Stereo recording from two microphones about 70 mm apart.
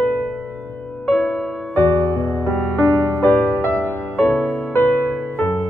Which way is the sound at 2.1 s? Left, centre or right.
Left.